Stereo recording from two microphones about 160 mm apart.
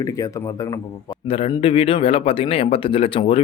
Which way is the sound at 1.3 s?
35° left (ahead or behind).